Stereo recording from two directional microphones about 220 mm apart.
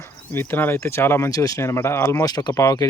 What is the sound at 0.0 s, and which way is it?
Speech, 10° left (ahead or behind).